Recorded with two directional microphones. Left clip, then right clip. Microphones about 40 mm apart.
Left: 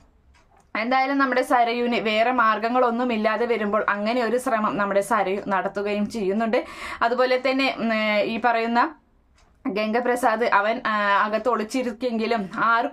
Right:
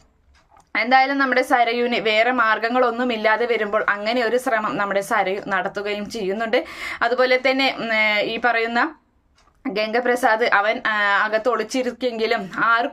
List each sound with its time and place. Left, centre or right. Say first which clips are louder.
0.7 s a woman's voice: right 5 dB; left